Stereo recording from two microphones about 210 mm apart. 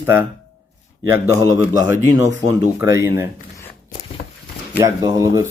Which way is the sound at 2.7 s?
15° right (ahead or behind).